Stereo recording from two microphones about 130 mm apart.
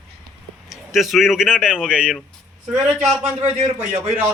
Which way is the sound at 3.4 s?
60° right (ahead or behind).